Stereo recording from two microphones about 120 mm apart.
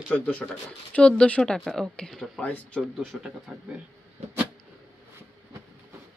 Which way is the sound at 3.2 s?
10° right (ahead or behind).